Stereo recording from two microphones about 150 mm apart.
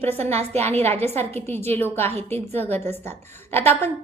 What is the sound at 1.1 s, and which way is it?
A woman's voice, 15° left (ahead or behind).